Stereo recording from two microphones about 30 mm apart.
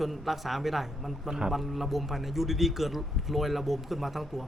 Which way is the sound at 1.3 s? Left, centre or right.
Centre.